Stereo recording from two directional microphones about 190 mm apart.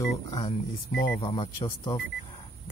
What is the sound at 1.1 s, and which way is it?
Speech, 30° left (ahead or behind).